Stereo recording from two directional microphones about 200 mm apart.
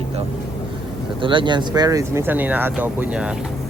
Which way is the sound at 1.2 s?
25° right (ahead or behind).